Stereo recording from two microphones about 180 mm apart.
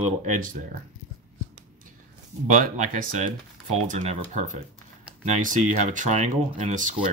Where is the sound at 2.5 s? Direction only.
45° right (ahead or behind).